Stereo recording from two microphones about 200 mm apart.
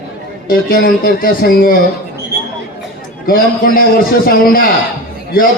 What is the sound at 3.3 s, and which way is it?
A man's voice, 45° left (ahead or behind).